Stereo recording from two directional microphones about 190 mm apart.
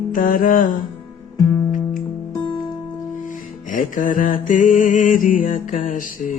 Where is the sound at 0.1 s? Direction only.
45° left (ahead or behind).